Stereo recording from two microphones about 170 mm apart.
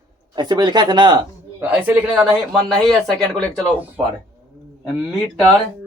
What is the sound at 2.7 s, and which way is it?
Speech, centre (ahead or behind).